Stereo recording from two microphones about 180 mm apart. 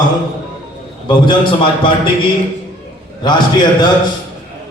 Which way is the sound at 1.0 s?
25° left (ahead or behind).